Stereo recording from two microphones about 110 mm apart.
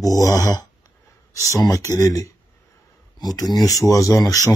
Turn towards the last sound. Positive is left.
turn(degrees=30)  # may be behind; listen again after turning